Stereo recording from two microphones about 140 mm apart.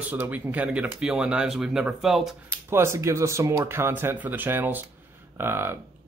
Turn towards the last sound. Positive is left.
turn(degrees=-15)  # may be behind; listen again after turning